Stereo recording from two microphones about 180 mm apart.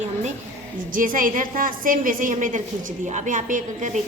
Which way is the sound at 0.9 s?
50° right (ahead or behind).